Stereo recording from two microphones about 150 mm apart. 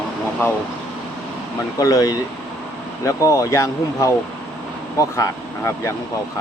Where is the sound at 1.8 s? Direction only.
20° left (ahead or behind).